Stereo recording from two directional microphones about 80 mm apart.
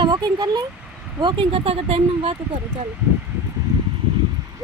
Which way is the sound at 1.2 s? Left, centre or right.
Right.